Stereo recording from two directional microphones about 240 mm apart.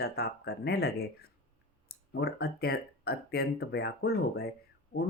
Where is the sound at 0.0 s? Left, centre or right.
Left.